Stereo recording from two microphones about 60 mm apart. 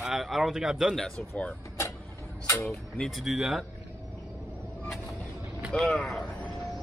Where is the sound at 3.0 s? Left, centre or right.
Centre.